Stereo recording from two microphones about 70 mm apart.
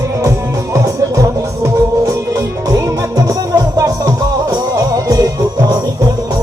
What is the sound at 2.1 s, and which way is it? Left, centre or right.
Music, right.